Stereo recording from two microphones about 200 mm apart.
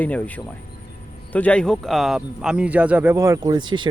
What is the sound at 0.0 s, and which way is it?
Speech, 10° left (ahead or behind).